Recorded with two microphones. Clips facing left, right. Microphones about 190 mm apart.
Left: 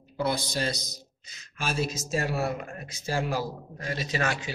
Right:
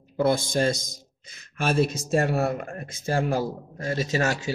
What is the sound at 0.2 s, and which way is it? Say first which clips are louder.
A man's voice: right 6 dB; 50° right (ahead or behind).